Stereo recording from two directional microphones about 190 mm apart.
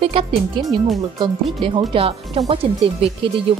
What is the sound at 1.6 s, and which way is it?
Speech, 25° right (ahead or behind).